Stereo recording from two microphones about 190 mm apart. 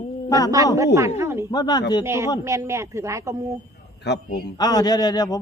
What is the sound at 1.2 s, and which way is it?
Speech, 15° right (ahead or behind).